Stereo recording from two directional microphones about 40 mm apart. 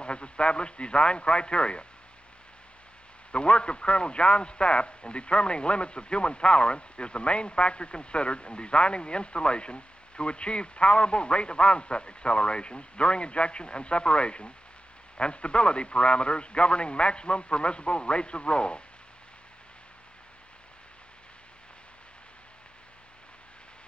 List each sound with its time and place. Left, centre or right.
0.0 s a man's voice: left
3.3 s a man's voice: left